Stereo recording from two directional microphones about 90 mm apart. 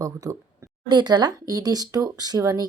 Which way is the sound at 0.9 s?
50° right (ahead or behind).